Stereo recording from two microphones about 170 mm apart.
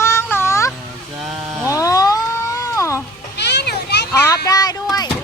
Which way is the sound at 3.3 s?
85° left.